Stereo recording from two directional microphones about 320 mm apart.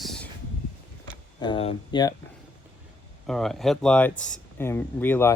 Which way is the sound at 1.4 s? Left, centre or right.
Centre.